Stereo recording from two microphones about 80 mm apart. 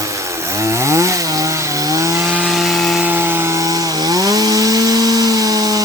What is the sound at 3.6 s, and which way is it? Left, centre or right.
Chainsaw, right.